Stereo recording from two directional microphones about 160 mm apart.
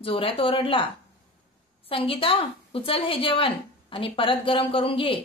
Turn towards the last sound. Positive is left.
turn(degrees=35)  # may be behind; listen again after turning